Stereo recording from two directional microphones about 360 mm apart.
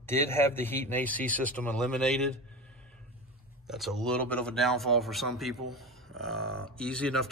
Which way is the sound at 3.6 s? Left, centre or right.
Centre.